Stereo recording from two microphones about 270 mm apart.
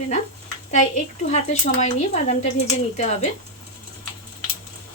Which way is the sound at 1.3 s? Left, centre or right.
Left.